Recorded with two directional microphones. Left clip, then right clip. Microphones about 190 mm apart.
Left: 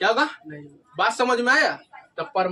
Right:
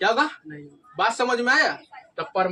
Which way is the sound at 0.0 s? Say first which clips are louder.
Even; 30° left (ahead or behind).